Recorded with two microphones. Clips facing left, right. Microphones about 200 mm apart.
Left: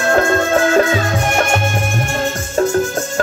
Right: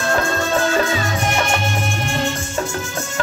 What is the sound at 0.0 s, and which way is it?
Music, 55° left (ahead or behind).